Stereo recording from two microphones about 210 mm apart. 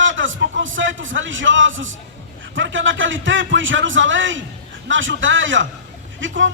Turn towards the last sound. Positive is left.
turn(degrees=-65)  # may be behind; listen again after turning